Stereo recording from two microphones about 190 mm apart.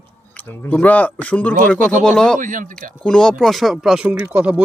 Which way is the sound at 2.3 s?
45° right (ahead or behind).